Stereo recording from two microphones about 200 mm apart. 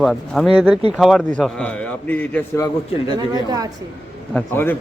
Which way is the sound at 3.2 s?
20° right (ahead or behind).